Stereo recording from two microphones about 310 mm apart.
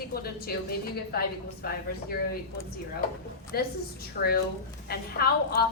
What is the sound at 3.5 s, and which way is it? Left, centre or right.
A woman's voice, left.